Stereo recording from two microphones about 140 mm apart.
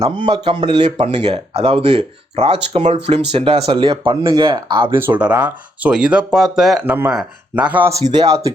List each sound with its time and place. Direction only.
0.2 s speech: 35° right (ahead or behind)
0.9 s speech: 50° right (ahead or behind); by 4.9 s 35° right (ahead or behind)
4.9 s speech: 10° right (ahead or behind)
8.1 s speech: 30° right (ahead or behind)